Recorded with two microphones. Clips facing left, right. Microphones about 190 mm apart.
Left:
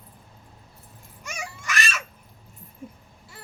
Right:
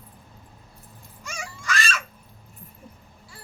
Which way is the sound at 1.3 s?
20° left (ahead or behind).